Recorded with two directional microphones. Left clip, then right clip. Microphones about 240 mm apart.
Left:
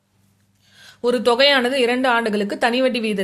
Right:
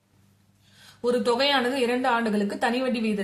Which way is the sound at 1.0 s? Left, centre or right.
Left.